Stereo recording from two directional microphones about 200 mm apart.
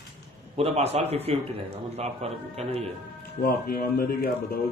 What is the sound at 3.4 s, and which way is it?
Speech, 50° left (ahead or behind).